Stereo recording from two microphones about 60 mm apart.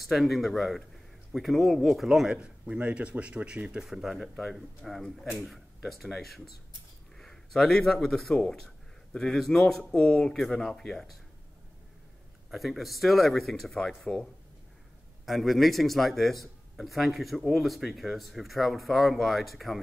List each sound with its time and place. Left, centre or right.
0.0 s speech: centre; by 3.7 s right
3.7 s speech: centre
12.4 s speech: centre